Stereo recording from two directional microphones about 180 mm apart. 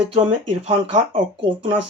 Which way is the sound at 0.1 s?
35° right (ahead or behind).